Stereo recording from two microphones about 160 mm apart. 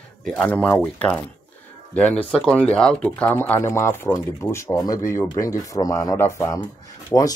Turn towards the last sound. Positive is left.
turn(degrees=20)  # may be behind; listen again after turning